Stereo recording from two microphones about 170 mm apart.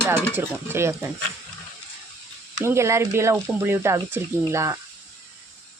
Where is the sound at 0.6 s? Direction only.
15° right (ahead or behind).